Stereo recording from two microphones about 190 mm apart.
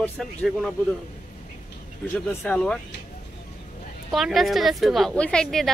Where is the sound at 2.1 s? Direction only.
5° left (ahead or behind).